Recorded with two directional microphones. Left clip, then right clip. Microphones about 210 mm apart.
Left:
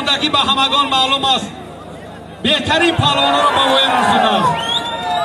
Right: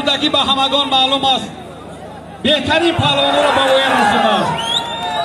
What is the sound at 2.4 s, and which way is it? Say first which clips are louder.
A man's voice: even; 20° left (ahead or behind).